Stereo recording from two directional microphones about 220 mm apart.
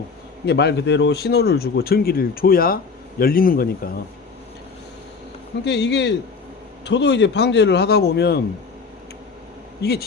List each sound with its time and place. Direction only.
0.4 s speech: 50° left (ahead or behind)
5.6 s speech: 50° left (ahead or behind)